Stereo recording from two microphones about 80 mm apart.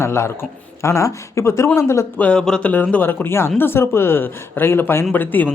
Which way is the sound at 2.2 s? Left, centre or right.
Centre.